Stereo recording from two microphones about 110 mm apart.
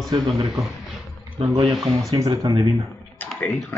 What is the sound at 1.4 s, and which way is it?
Speech, 55° right (ahead or behind).